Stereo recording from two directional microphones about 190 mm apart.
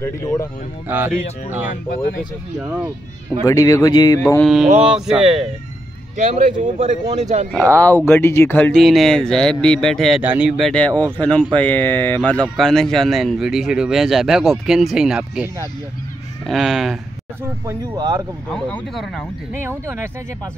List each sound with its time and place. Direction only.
0.0 s speech: 15° left (ahead or behind)
0.8 s speech: 10° right (ahead or behind)
3.4 s speech: 20° left (ahead or behind)
4.4 s speech: centre (ahead or behind)
6.1 s speech: 40° right (ahead or behind)
7.7 s speech: 10° left (ahead or behind); by 10.7 s 5° right (ahead or behind)
11.1 s speech: 5° left (ahead or behind)
17.4 s speech: 20° right (ahead or behind)
18.5 s speech: 5° left (ahead or behind)
19.7 s speech: 15° right (ahead or behind)